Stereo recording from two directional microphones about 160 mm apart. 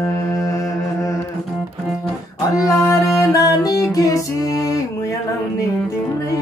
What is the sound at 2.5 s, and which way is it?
Music, 20° left (ahead or behind).